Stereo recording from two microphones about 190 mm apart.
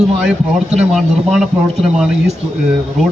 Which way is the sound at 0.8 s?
Centre (ahead or behind).